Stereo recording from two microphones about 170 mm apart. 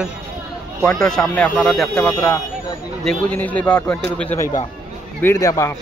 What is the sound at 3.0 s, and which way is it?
Speech, 5° left (ahead or behind).